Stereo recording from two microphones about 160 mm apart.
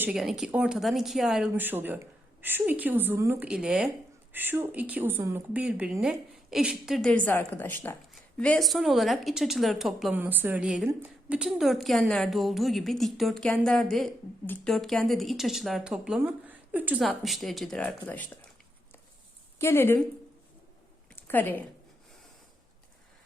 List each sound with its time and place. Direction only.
0.0 s speech: 5° right (ahead or behind)
19.5 s a woman's voice: 15° left (ahead or behind)
21.2 s a woman's voice: 15° left (ahead or behind)